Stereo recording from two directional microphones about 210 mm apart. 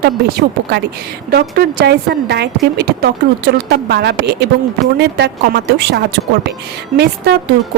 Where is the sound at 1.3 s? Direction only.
45° right (ahead or behind).